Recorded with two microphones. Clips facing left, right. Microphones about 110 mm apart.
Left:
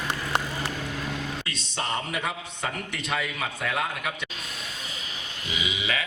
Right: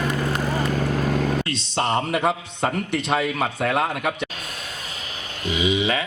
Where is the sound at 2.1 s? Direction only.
55° right (ahead or behind).